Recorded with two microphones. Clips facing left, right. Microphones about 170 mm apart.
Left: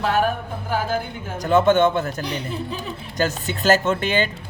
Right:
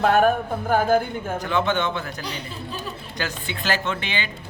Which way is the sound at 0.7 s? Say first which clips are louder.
Right 5 dB; 50° right (ahead or behind).